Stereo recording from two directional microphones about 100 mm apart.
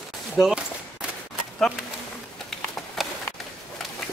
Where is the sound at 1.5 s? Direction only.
5° left (ahead or behind).